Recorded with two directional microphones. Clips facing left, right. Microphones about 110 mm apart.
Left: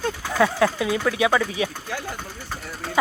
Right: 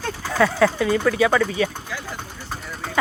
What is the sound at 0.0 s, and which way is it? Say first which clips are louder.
Speech: even; 5° left (ahead or behind).